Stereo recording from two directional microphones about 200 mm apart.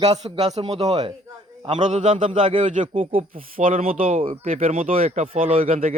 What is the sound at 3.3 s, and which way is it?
Speech, 40° right (ahead or behind).